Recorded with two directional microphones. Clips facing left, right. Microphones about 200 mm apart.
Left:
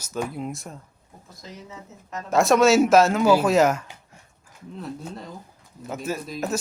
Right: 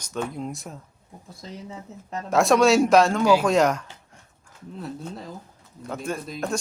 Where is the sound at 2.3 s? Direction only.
Centre (ahead or behind).